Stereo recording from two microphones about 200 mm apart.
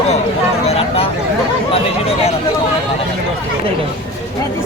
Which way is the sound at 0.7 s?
30° left (ahead or behind).